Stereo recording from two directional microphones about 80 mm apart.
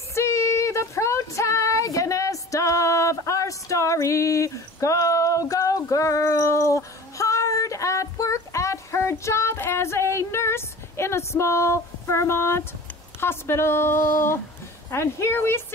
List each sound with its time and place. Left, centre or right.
0.1 s female singing: left
13.2 s speech: left